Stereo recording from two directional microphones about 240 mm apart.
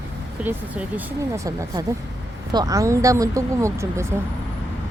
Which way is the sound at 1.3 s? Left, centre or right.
Centre.